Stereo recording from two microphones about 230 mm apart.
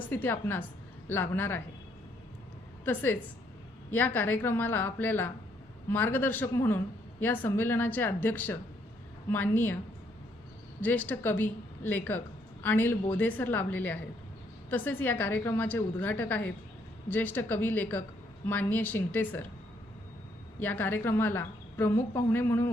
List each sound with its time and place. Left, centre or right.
0.1 s speech: centre
2.8 s speech: centre
10.8 s speech: centre
20.6 s speech: centre